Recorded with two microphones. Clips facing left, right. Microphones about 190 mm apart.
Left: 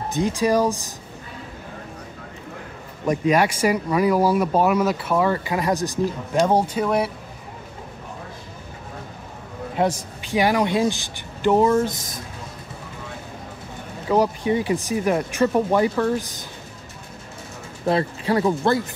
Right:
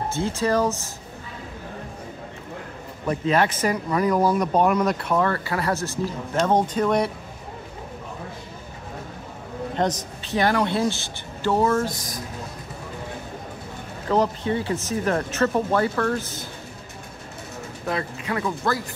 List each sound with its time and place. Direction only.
0.1 s speech: 15° left (ahead or behind)
3.1 s speech: 10° left (ahead or behind)
9.8 s speech: 10° left (ahead or behind)
14.0 s speech: 10° left (ahead or behind)
17.8 s speech: 30° left (ahead or behind)